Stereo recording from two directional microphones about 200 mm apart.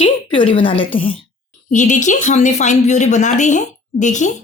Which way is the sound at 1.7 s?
35° left (ahead or behind).